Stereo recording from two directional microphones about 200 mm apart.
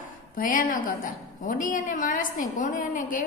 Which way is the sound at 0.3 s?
45° left (ahead or behind).